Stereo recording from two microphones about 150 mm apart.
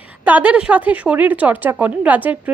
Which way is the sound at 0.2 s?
10° right (ahead or behind).